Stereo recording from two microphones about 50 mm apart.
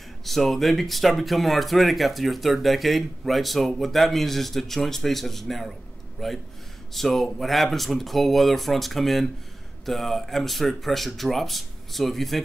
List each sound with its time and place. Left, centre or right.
0.2 s speech: centre